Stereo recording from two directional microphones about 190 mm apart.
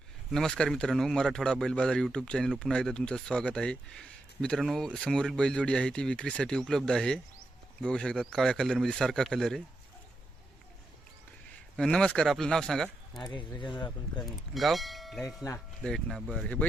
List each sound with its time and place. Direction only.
0.3 s speech: 5° left (ahead or behind)
11.8 s speech: 5° left (ahead or behind)
13.2 s speech: 25° left (ahead or behind)
14.2 s speech: centre (ahead or behind)